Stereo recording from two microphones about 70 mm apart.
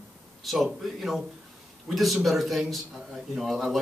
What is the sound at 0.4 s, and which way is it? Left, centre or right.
Speech, centre.